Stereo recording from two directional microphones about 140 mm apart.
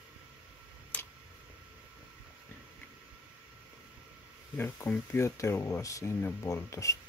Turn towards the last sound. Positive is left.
turn(degrees=25)  # may be behind; listen again after turning